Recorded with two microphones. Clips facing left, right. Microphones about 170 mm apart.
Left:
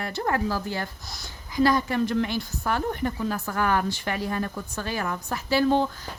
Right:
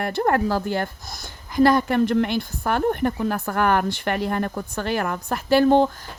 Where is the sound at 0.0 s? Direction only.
55° right (ahead or behind).